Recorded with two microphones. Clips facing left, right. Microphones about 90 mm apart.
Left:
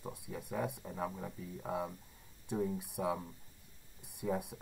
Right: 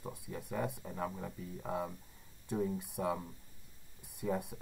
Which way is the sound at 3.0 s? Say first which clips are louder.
Even; 5° left (ahead or behind).